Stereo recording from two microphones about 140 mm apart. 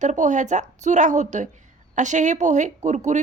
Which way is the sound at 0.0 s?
60° right (ahead or behind).